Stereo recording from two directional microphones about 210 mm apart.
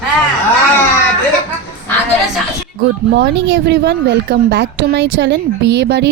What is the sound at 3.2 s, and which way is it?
Speech, 55° right (ahead or behind).